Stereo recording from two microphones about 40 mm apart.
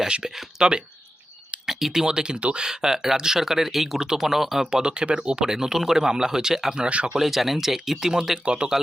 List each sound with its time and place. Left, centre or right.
0.3 s speech: centre
4.8 s speech: right
6.8 s speech: right
7.2 s speech: centre
8.4 s speech: right